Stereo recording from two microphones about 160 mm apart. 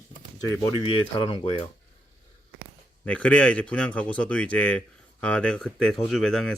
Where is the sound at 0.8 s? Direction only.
35° left (ahead or behind).